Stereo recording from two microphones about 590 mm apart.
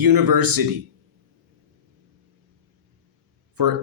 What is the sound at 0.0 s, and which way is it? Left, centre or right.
Speech, right.